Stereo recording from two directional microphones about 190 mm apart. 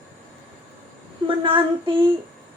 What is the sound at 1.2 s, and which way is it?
Speech, 25° right (ahead or behind).